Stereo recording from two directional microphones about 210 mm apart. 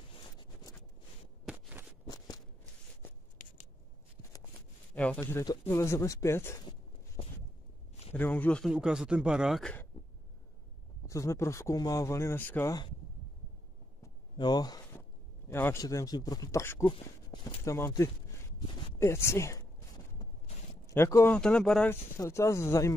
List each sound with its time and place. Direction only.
0.1 s zipper: 20° left (ahead or behind)
1.4 s walk: 5° right (ahead or behind)
2.0 s a sound: 20° left (ahead or behind)
4.9 s speech: 5° left (ahead or behind)
5.2 s speech: 20° left (ahead or behind)
7.2 s a sound: 20° left (ahead or behind)
8.1 s speech: 10° left (ahead or behind)
11.1 s speech: 15° left (ahead or behind)
14.0 s a sound: 20° left (ahead or behind)
15.5 s speech: 10° left (ahead or behind)
16.8 s speech: 25° left (ahead or behind)